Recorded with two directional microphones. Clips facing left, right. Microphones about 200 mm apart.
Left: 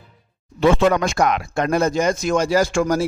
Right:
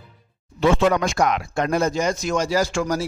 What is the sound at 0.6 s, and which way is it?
Speech, 55° left (ahead or behind).